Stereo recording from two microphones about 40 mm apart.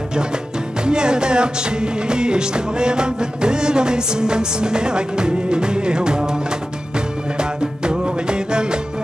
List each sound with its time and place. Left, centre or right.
0.8 s music: right